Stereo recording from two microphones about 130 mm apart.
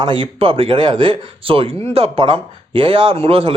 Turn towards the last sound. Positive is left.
turn(degrees=-45)  # may be behind; listen again after turning